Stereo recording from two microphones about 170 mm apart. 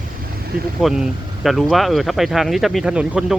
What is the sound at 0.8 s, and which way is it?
Speech, centre (ahead or behind).